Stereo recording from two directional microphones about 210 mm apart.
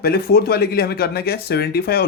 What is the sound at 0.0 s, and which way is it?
Speech, 50° left (ahead or behind).